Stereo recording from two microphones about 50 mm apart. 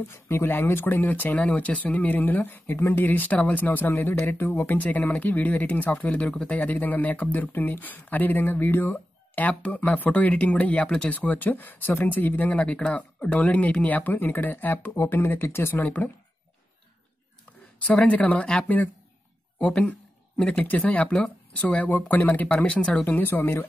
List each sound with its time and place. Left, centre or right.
0.1 s speech: left
6.0 s speech: left
12.5 s speech: left
15.7 s speech: left
17.8 s speech: left
20.3 s speech: left
22.5 s speech: left
23.0 s speech: left